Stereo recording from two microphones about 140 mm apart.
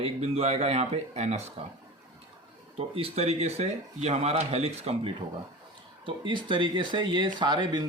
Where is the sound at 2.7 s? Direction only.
45° right (ahead or behind).